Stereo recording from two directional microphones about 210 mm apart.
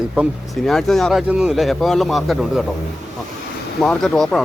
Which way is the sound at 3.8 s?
Centre (ahead or behind).